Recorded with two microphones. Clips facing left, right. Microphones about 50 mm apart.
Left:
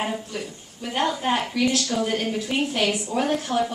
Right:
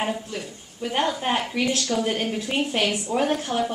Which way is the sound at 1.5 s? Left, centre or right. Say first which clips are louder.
Left 1 dB; right.